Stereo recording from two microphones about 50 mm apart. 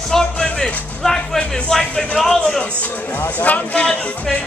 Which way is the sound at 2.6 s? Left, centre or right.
Left.